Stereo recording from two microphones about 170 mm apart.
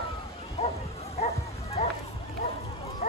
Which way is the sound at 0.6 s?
40° left (ahead or behind).